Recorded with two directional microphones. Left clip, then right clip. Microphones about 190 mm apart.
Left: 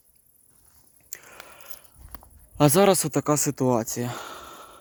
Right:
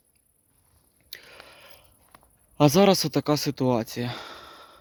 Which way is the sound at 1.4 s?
25° right (ahead or behind).